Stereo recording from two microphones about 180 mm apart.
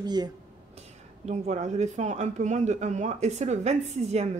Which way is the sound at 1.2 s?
40° right (ahead or behind).